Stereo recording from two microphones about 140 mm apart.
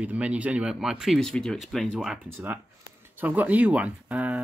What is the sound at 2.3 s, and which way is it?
Speech, 15° right (ahead or behind).